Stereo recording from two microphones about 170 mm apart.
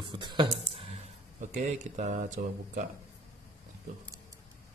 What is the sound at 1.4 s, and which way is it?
Speech, 45° right (ahead or behind).